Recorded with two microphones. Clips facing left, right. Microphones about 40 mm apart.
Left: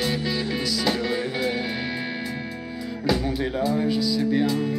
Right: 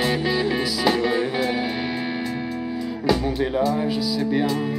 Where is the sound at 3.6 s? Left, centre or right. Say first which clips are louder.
Right 1 dB; centre.